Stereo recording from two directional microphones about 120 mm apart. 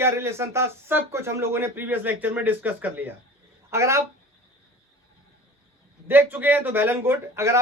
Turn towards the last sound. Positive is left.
turn(degrees=-25)  # may be behind; listen again after turning